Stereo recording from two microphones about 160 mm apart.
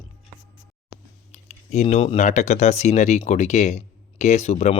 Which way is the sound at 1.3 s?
45° left (ahead or behind).